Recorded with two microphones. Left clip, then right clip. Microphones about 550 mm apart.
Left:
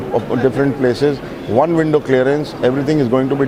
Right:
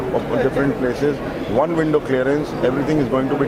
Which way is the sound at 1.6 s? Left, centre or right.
Left.